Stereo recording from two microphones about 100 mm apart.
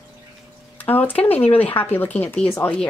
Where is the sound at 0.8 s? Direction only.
20° left (ahead or behind).